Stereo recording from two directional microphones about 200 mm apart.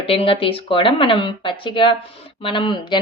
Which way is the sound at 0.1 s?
25° left (ahead or behind).